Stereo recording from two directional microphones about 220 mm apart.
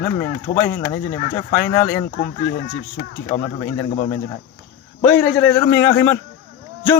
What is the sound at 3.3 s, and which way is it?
Speech, 35° left (ahead or behind).